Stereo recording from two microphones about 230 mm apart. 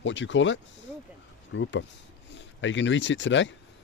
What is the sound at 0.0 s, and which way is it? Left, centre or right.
Speech, left.